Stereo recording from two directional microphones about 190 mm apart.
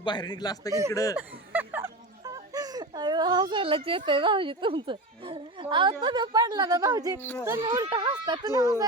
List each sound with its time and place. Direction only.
0.0 s a man's voice: 25° left (ahead or behind)
1.1 s speech: 10° right (ahead or behind)
7.2 s speech: 10° left (ahead or behind)
7.7 s speech: 20° right (ahead or behind)